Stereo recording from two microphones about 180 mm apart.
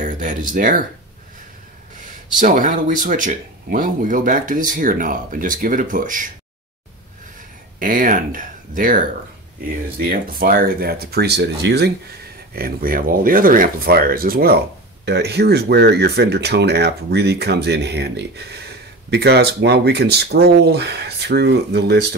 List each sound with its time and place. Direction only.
0.0 s a sound: 45° right (ahead or behind)
0.5 s speech: 50° right (ahead or behind)
2.4 s speech: 45° right (ahead or behind)
7.8 s speech: 50° right (ahead or behind); by 11.9 s 70° right (ahead or behind)
12.5 s speech: 55° right (ahead or behind)